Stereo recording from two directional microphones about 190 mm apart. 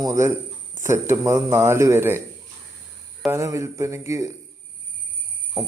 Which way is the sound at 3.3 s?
15° right (ahead or behind).